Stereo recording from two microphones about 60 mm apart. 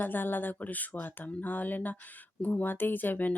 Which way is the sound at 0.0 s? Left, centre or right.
Left.